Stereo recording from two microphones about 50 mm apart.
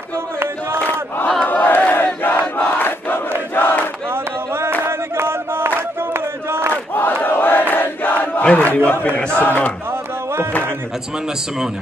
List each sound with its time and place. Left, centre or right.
0.8 s crowd: left
1.4 s battle cry: left
3.5 s crowd: left
4.1 s a sound: right
4.8 s chant: right
7.2 s battle cry: left
7.7 s a sound: left
8.5 s a man's voice: left
9.4 s battle cry: left